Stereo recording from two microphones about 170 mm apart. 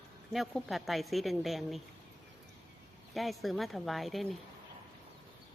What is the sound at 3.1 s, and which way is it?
Speech, centre (ahead or behind).